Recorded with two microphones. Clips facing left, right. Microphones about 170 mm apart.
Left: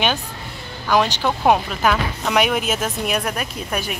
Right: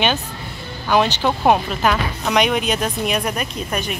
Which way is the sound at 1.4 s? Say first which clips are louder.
Even; centre (ahead or behind).